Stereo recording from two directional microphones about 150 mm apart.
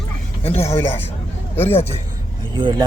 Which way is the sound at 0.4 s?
45° left (ahead or behind).